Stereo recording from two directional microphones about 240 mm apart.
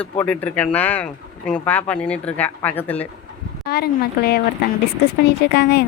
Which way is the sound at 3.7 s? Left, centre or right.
Left.